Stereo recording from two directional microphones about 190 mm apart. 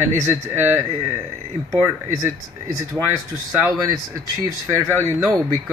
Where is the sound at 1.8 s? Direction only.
15° right (ahead or behind).